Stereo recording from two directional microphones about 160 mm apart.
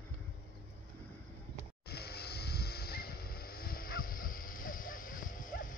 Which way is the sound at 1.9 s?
90° left.